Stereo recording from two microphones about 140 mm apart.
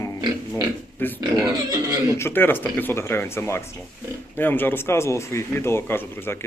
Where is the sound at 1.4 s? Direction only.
20° right (ahead or behind).